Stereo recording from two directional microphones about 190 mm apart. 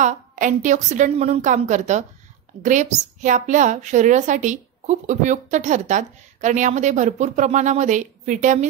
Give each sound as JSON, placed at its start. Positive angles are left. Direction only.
{"t": 0.0, "sound": "a woman's voice", "side_deg": -40}